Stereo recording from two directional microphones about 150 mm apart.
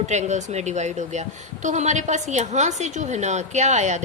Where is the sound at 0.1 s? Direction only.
50° right (ahead or behind).